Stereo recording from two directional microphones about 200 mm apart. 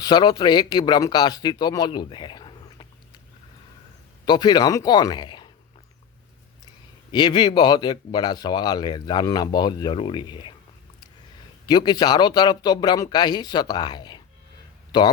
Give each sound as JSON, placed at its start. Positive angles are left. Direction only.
{"t": 0.0, "sound": "speech", "side_deg": 20}
{"t": 4.3, "sound": "speech", "side_deg": 20}
{"t": 7.1, "sound": "speech", "side_deg": 20}
{"t": 11.6, "sound": "speech", "side_deg": 20}